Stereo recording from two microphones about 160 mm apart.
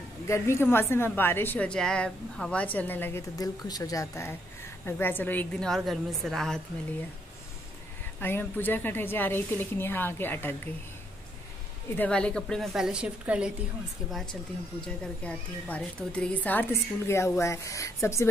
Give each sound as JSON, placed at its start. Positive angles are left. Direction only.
{"t": 0.3, "sound": "a woman's voice", "side_deg": 15}
{"t": 8.2, "sound": "a woman's voice", "side_deg": 15}
{"t": 12.0, "sound": "a woman's voice", "side_deg": 5}